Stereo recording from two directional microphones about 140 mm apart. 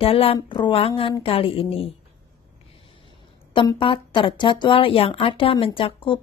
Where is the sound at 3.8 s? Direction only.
40° left (ahead or behind).